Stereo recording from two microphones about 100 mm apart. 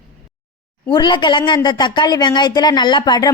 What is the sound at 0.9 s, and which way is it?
Speech, 50° left (ahead or behind).